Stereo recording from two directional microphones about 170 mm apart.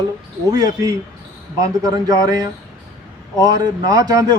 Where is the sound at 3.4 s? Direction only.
25° right (ahead or behind).